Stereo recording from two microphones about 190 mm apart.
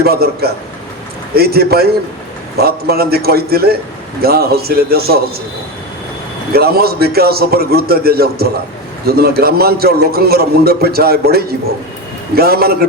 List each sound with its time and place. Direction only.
0.0 s a man's voice: 55° right (ahead or behind)
6.5 s a man's voice: 55° right (ahead or behind)